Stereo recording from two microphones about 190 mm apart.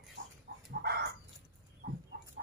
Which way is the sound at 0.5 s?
60° right (ahead or behind).